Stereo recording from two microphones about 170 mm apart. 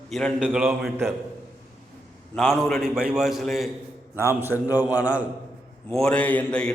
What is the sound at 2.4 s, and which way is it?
A man's voice, centre (ahead or behind).